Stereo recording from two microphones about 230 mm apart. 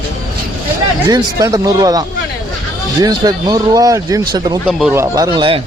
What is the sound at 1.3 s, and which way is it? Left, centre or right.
Speech, centre.